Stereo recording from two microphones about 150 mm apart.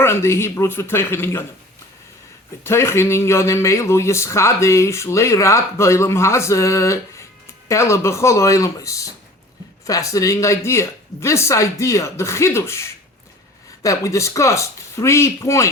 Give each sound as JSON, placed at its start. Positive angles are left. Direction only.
{"t": 0.0, "sound": "a man's voice", "side_deg": 15}
{"t": 2.6, "sound": "speech", "side_deg": 15}